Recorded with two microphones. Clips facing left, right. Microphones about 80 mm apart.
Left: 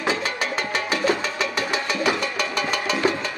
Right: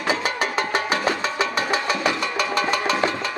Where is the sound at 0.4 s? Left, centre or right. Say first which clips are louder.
Right 3 dB; right.